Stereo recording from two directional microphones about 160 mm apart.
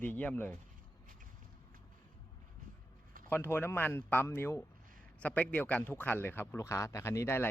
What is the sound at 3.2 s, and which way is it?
Speech, 10° left (ahead or behind).